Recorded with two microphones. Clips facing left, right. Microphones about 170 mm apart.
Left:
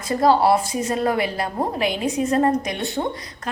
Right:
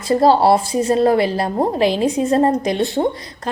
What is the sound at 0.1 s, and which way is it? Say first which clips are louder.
A woman's voice: right 4 dB; 30° right (ahead or behind).